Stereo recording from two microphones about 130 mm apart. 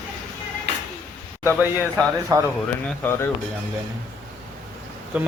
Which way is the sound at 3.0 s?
20° left (ahead or behind).